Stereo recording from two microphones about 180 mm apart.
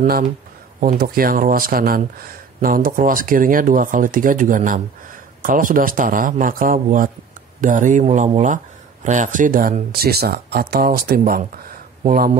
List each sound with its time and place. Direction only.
0.0 s speech: 50° right (ahead or behind)